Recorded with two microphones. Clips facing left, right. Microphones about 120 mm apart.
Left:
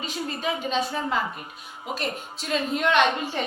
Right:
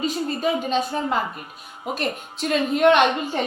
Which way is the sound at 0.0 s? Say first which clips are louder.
Right 6 dB; 40° right (ahead or behind).